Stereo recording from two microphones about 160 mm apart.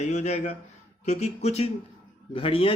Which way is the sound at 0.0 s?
45° left (ahead or behind).